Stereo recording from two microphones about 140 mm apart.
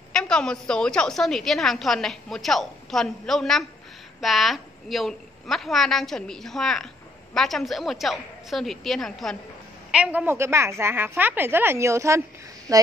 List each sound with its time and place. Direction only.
0.1 s a woman's voice: 5° left (ahead or behind); by 12.2 s 20° right (ahead or behind)